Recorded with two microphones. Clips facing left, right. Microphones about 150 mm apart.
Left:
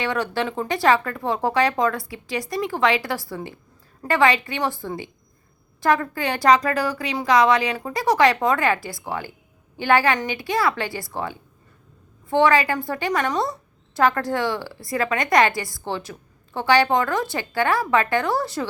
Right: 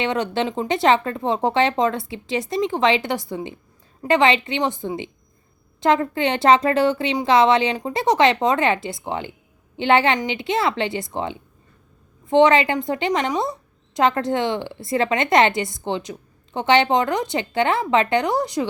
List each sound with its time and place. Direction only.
0.0 s a woman's voice: 20° right (ahead or behind)